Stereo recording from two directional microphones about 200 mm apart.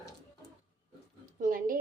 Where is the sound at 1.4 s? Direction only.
45° right (ahead or behind).